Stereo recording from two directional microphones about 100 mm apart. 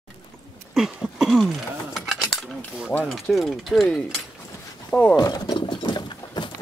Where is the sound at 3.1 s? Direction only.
Centre (ahead or behind).